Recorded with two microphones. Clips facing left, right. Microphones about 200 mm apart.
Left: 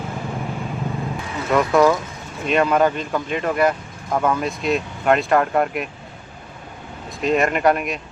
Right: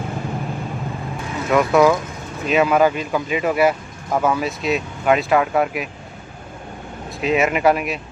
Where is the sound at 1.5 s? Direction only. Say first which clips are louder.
Right 1 dB; 5° right (ahead or behind).